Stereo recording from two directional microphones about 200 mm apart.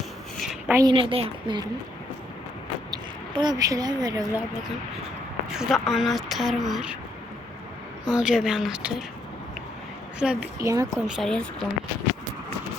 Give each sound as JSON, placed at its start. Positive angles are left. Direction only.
{"t": 0.7, "sound": "speech", "side_deg": -15}
{"t": 0.9, "sound": "a woman's voice", "side_deg": -25}
{"t": 2.9, "sound": "speech", "side_deg": -20}
{"t": 5.5, "sound": "speech", "side_deg": 0}
{"t": 8.1, "sound": "speech", "side_deg": -5}
{"t": 10.2, "sound": "speech", "side_deg": -5}
{"t": 10.6, "sound": "speech", "side_deg": -15}
{"t": 11.0, "sound": "speech", "side_deg": 0}